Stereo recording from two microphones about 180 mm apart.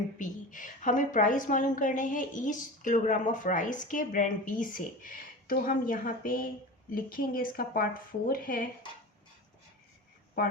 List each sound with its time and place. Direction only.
0.2 s a woman's voice: 45° left (ahead or behind)